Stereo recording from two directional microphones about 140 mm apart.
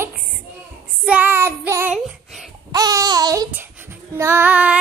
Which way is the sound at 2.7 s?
25° right (ahead or behind).